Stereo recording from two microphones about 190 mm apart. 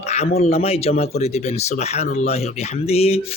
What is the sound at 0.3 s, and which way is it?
A man's voice, 35° left (ahead or behind).